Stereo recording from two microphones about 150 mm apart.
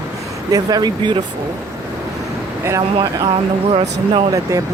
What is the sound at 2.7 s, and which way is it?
Speech, 20° right (ahead or behind).